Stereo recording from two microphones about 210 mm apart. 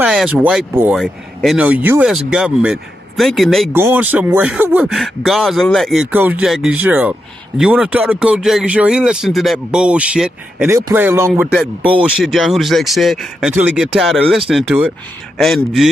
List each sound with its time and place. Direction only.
0.0 s speech: 5° right (ahead or behind)